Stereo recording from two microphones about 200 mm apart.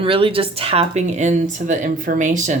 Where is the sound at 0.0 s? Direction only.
25° right (ahead or behind).